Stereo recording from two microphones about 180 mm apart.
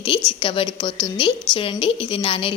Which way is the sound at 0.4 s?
30° left (ahead or behind).